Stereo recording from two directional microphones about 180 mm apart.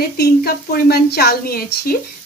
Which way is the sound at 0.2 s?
60° left (ahead or behind).